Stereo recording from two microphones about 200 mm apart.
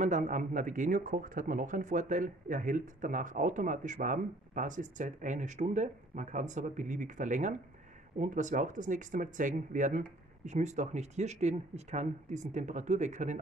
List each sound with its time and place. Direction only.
0.0 s speech: 40° right (ahead or behind)